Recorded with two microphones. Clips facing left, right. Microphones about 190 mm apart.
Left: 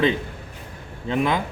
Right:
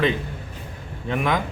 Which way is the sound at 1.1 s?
25° left (ahead or behind).